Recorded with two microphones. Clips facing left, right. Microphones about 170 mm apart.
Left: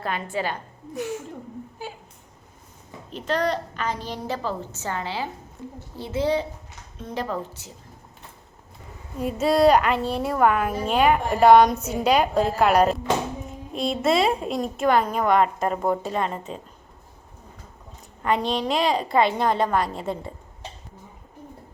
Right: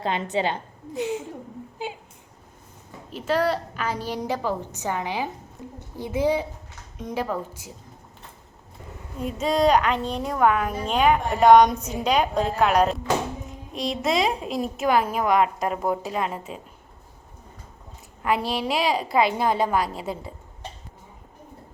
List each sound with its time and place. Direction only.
0.0 s a woman's voice: 20° right (ahead or behind)
3.1 s a woman's voice: 5° right (ahead or behind)
9.1 s a woman's voice: 5° left (ahead or behind)
18.2 s a woman's voice: 5° right (ahead or behind)